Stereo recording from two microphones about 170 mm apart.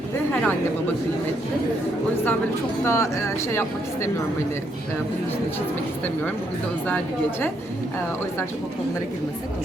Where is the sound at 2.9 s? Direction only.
15° left (ahead or behind).